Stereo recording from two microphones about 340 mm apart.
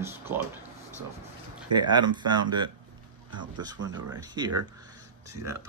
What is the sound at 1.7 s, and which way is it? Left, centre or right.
Speech, centre.